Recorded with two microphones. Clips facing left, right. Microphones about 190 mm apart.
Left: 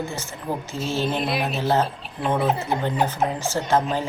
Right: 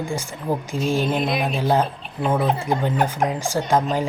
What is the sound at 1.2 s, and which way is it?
Speech, 5° left (ahead or behind).